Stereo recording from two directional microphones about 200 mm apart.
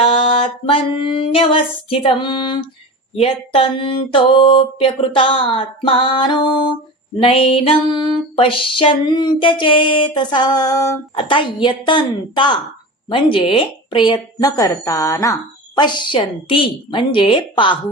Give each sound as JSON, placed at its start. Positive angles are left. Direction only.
{"t": 0.0, "sound": "speech", "side_deg": 25}